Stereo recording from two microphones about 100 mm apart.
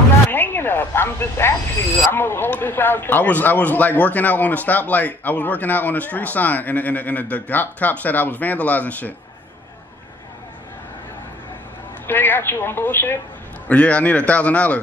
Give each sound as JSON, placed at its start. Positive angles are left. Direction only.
{"t": 0.3, "sound": "a sound", "side_deg": 20}
{"t": 2.1, "sound": "speech", "side_deg": 20}
{"t": 12.1, "sound": "a woman's voice", "side_deg": 20}